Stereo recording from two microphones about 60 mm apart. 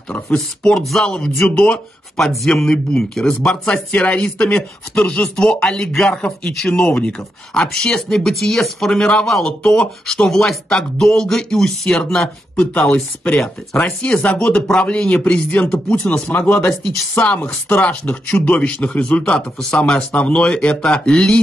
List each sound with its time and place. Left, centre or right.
0.1 s speech: centre
0.7 s speech: centre
2.1 s speech: centre
6.7 s a man's voice: centre
16.3 s speech: left
17.1 s a man's voice: left